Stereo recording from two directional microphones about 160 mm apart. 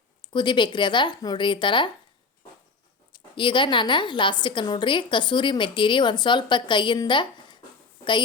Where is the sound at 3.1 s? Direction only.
30° left (ahead or behind).